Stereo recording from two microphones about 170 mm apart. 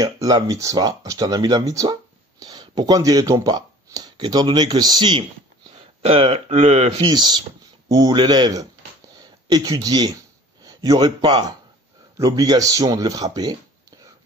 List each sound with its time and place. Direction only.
0.0 s speech: 20° right (ahead or behind)